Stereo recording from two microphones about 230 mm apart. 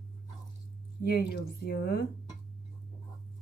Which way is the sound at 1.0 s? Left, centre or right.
Left.